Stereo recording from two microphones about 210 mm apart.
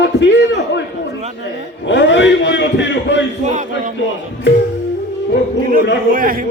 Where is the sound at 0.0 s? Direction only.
60° left (ahead or behind).